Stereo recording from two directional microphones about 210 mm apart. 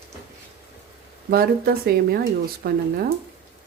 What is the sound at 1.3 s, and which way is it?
Speech, 45° right (ahead or behind).